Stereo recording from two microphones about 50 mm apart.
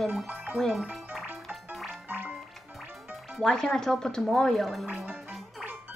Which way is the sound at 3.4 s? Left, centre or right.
Centre.